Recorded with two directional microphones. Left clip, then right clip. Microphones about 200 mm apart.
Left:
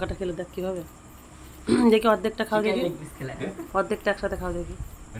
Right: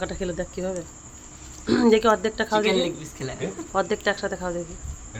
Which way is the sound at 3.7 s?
Centre (ahead or behind).